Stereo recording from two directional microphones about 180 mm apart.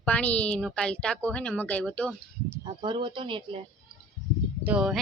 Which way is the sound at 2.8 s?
30° right (ahead or behind).